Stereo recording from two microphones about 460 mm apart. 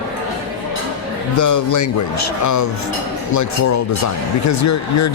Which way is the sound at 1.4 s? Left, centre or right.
Left.